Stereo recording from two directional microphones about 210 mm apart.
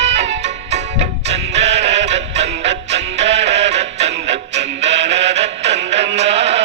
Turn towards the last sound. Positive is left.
turn(degrees=-30)  # may be behind; listen again after turning